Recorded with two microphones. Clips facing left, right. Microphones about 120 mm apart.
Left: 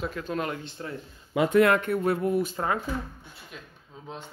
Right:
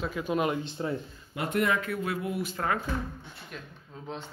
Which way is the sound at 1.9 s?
45° left (ahead or behind).